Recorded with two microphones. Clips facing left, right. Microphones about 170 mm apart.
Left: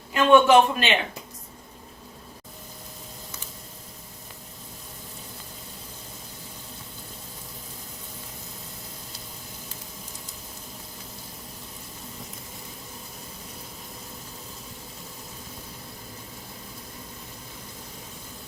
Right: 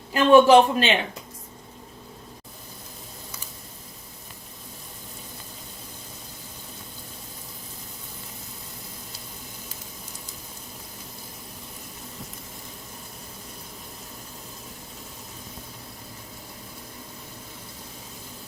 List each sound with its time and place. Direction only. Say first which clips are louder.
0.1 s a man's voice: right 2 dB; 35° right (ahead or behind)